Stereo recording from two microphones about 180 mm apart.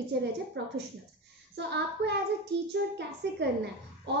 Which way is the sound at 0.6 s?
80° right.